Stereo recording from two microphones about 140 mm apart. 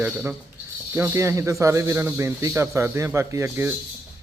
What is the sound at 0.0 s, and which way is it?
A man's voice, 10° right (ahead or behind).